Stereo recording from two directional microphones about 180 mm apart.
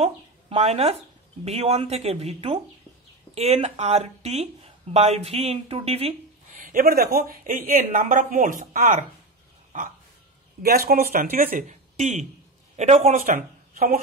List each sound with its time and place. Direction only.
0.0 s speech: 35° right (ahead or behind)
6.5 s speech: 50° right (ahead or behind)
10.6 s speech: 55° right (ahead or behind); by 13.2 s 35° right (ahead or behind)
13.2 s speech: 50° right (ahead or behind)